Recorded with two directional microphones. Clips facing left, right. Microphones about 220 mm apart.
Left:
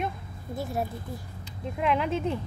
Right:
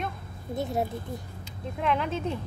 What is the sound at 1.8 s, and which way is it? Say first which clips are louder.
Speech: left 1 dB; 5° left (ahead or behind).